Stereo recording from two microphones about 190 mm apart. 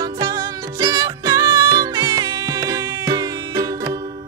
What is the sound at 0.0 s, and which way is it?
Music, 20° right (ahead or behind).